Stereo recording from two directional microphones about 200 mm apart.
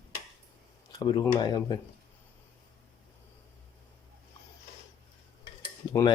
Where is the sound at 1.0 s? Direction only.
20° left (ahead or behind).